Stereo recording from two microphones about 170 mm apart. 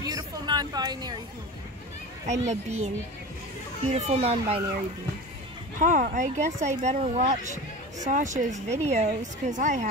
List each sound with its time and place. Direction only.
0.0 s a sound: 25° right (ahead or behind)
2.2 s a child's voice: 40° right (ahead or behind)
3.9 s a child's voice: 40° right (ahead or behind)
5.8 s speech: 50° right (ahead or behind)